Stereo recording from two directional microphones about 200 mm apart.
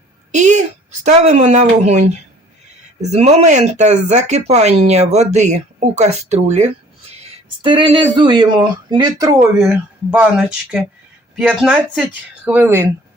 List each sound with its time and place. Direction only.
0.3 s a sound: 35° right (ahead or behind)
1.0 s speech: 35° right (ahead or behind); by 9.6 s 15° right (ahead or behind)
9.6 s speech: 5° right (ahead or behind)